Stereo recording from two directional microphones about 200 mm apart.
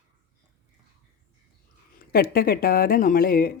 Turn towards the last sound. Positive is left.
turn(degrees=45)  # may be behind; listen again after turning